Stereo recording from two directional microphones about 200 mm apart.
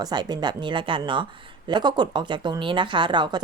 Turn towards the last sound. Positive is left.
turn(degrees=-20)  # may be behind; listen again after turning